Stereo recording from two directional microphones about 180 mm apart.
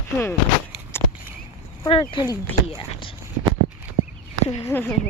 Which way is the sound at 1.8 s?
30° left (ahead or behind).